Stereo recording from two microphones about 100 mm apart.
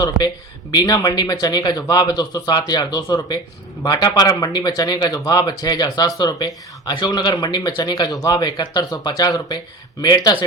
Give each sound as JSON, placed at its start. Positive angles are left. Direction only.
{"t": 0.7, "sound": "speech", "side_deg": 40}